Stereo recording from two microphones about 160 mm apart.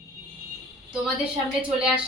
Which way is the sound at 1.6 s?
5° right (ahead or behind).